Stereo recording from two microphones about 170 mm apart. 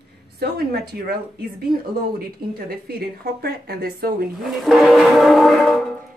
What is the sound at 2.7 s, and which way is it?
Speech, 65° right (ahead or behind).